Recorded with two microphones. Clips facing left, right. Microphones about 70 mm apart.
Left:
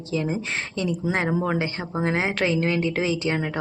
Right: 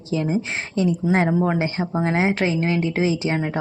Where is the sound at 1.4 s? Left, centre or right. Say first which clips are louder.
Right 3 dB; right.